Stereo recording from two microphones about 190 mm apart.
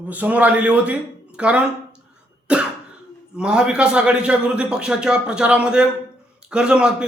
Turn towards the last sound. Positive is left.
turn(degrees=-5)  # may be behind; listen again after turning